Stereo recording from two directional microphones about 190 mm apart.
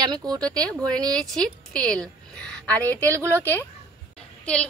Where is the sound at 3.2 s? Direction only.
15° right (ahead or behind).